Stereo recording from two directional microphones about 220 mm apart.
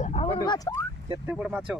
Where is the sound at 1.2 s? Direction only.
5° right (ahead or behind).